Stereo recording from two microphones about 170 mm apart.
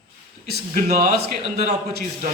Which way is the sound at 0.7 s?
50° right (ahead or behind).